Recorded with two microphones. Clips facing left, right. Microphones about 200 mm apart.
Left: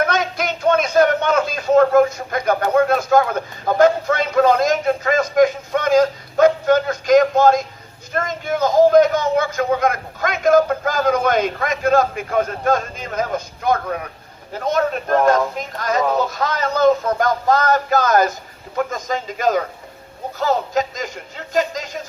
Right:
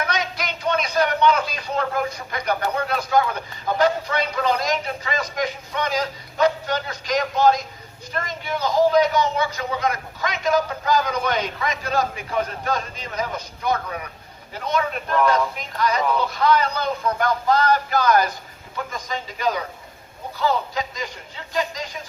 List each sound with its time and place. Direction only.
0.0 s a man's voice: 50° left (ahead or behind)